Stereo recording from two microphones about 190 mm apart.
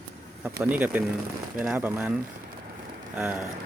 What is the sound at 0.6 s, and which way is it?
Speech, 10° right (ahead or behind).